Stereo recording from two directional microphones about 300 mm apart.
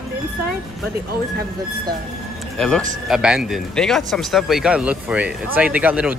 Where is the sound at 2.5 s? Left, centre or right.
Centre.